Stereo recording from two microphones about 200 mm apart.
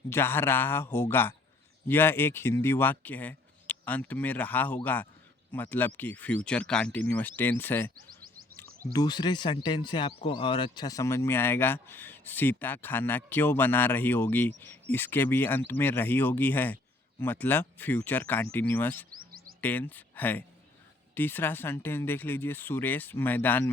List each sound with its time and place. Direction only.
0.1 s speech: 10° left (ahead or behind)
8.9 s speech: 20° left (ahead or behind)
19.1 s chirp: 45° right (ahead or behind)
19.6 s speech: 10° left (ahead or behind)